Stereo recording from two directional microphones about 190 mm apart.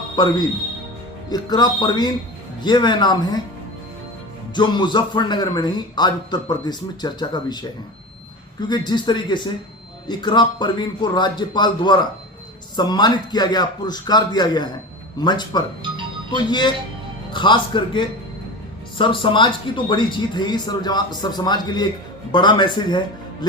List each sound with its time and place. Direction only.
0.2 s speech: 25° left (ahead or behind)
4.5 s speech: 25° left (ahead or behind)
8.6 s speech: 20° left (ahead or behind)